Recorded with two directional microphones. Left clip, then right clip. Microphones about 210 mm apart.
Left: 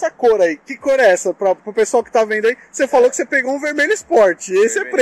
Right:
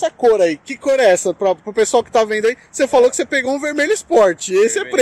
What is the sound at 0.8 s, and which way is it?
A woman's voice, 15° right (ahead or behind).